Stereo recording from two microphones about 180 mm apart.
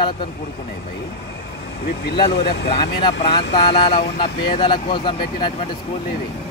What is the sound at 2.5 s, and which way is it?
Speech, 70° left (ahead or behind).